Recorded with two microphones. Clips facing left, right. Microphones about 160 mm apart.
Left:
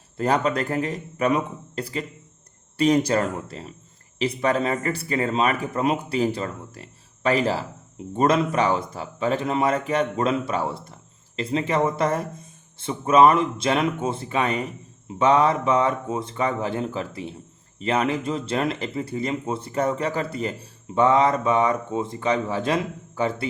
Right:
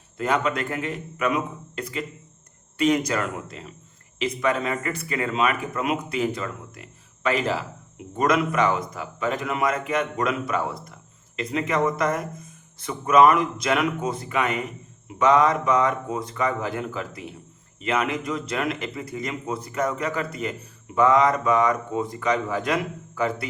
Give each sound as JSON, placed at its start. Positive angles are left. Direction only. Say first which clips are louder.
{"t": 0.2, "sound": "speech", "louder": "left 2 dB", "side_deg": 35}